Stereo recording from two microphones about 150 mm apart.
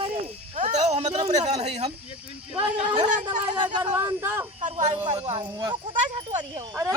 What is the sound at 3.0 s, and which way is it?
Speech, 55° right (ahead or behind).